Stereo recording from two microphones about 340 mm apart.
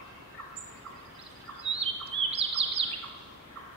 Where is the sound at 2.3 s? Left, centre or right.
Centre.